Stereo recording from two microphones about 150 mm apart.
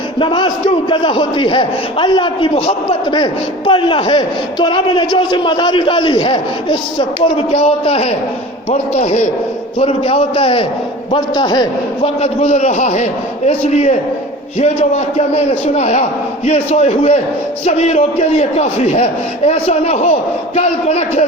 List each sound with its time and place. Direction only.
0.2 s a man's voice: 35° left (ahead or behind); by 9.3 s 50° left (ahead or behind)
9.7 s a man's voice: 35° left (ahead or behind)